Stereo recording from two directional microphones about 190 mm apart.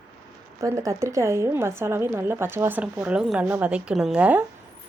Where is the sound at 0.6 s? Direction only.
15° right (ahead or behind).